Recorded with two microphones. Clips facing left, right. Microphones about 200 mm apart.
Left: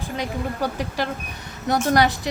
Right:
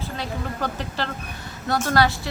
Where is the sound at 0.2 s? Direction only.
10° left (ahead or behind).